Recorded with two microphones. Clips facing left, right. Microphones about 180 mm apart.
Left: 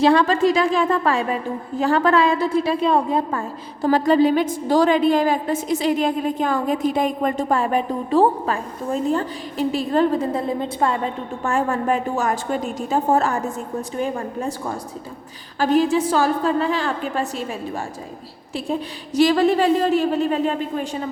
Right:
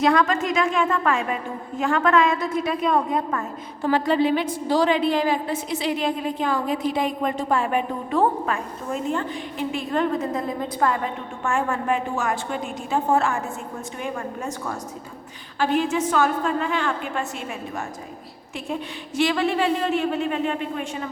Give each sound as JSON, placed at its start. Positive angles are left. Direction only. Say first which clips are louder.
{"t": 0.0, "sound": "a woman's voice", "louder": "left 4 dB", "side_deg": 30}
{"t": 18.5, "sound": "a woman's voice", "louder": "left 4 dB", "side_deg": 35}